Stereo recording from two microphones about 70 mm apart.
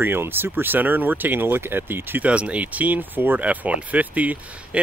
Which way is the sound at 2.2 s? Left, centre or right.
Centre.